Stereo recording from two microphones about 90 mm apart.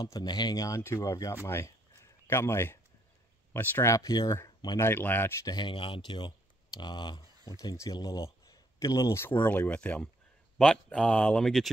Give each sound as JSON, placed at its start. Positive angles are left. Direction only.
{"t": 0.0, "sound": "speech", "side_deg": 50}
{"t": 0.6, "sound": "speech", "side_deg": 35}
{"t": 3.9, "sound": "speech", "side_deg": 40}
{"t": 4.7, "sound": "speech", "side_deg": 25}
{"t": 5.4, "sound": "speech", "side_deg": 50}
{"t": 5.7, "sound": "speech", "side_deg": 75}
{"t": 9.3, "sound": "speech", "side_deg": 15}
{"t": 11.4, "sound": "speech", "side_deg": 5}